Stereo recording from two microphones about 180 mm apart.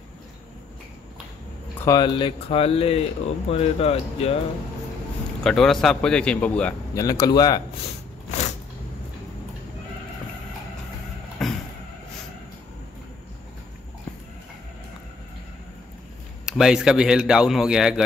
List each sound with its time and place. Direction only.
1.9 s speech: 25° left (ahead or behind)
5.4 s speech: 5° left (ahead or behind)
7.0 s speech: 20° left (ahead or behind)
11.4 s vehicle: centre (ahead or behind)
16.4 s speech: 5° right (ahead or behind)